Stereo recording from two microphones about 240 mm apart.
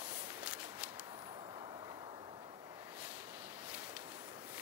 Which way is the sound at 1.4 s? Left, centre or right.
Centre.